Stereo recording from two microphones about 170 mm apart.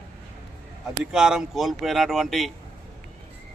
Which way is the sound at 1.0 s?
5° right (ahead or behind).